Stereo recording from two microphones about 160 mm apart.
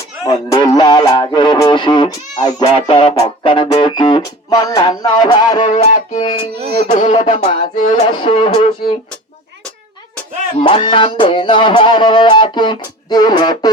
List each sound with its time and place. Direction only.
0.3 s music: 20° left (ahead or behind)
5.6 s music: 45° left (ahead or behind)
7.9 s music: 30° left (ahead or behind)
10.6 s music: 35° left (ahead or behind)